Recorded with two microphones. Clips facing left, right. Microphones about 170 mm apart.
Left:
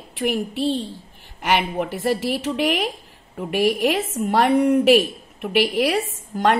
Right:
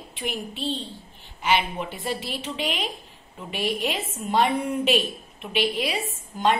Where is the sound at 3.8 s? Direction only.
75° left (ahead or behind).